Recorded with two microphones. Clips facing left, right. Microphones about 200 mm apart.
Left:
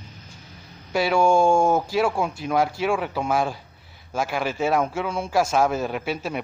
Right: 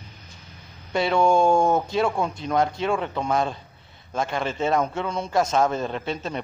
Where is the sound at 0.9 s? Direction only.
5° left (ahead or behind).